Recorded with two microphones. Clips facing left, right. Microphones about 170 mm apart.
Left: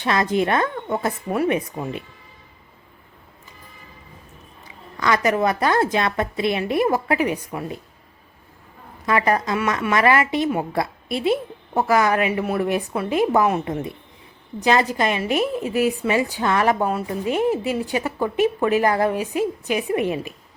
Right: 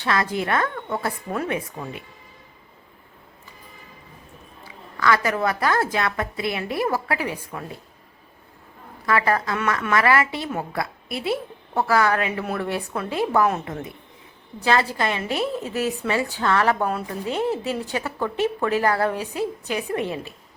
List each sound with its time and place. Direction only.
0.0 s a woman's voice: 20° left (ahead or behind)
4.9 s a woman's voice: 20° left (ahead or behind)
9.0 s a woman's voice: 20° left (ahead or behind)
14.6 s a woman's voice: 15° left (ahead or behind)